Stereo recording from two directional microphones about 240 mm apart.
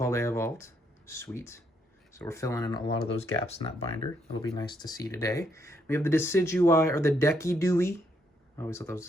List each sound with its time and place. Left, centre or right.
0.0 s speech: centre